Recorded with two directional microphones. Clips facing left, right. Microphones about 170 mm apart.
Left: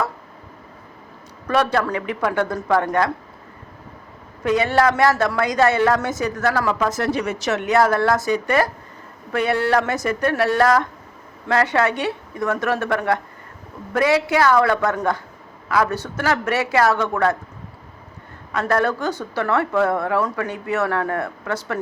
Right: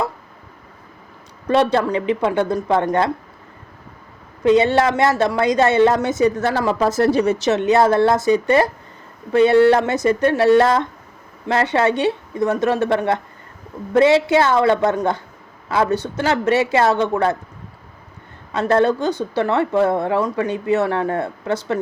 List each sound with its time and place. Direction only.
1.5 s a woman's voice: 25° right (ahead or behind)
4.4 s a woman's voice: 25° right (ahead or behind)
18.5 s a woman's voice: 25° right (ahead or behind)